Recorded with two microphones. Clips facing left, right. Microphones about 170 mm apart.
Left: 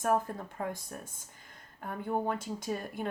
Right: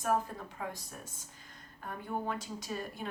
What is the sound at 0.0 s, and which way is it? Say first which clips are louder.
Speech: left 3 dB; 50° left (ahead or behind).